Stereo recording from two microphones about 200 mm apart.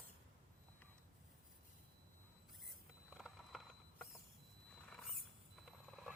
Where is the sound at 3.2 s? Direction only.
Centre (ahead or behind).